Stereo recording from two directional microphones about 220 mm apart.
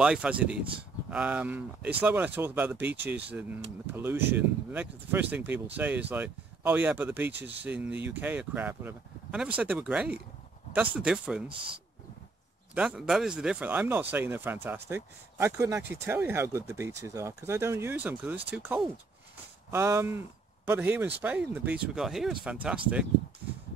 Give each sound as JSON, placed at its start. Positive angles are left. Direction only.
{"t": 0.0, "sound": "speech", "side_deg": -5}
{"t": 11.4, "sound": "speech", "side_deg": -25}
{"t": 12.7, "sound": "speech", "side_deg": -5}